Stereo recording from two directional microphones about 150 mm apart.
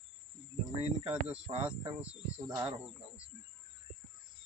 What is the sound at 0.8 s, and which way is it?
Speech, 40° right (ahead or behind).